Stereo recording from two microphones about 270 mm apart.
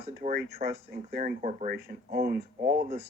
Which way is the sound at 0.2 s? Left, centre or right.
Right.